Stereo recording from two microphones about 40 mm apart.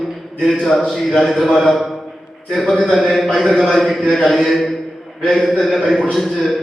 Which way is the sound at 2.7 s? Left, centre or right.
Centre.